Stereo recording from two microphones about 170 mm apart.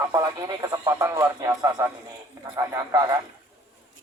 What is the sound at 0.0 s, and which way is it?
Speech, 20° right (ahead or behind).